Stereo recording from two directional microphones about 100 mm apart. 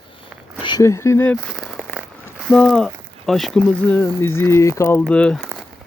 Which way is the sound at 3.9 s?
25° left (ahead or behind).